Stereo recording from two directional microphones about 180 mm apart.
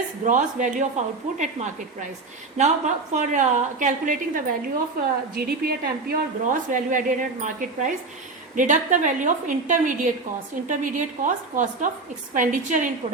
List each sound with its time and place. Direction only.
0.3 s a woman's voice: 45° right (ahead or behind)